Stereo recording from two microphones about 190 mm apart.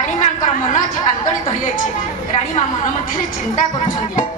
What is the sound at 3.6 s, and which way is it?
Speech, 45° left (ahead or behind).